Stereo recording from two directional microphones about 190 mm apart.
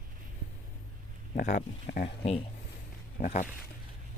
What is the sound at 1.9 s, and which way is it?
Speech, 40° left (ahead or behind).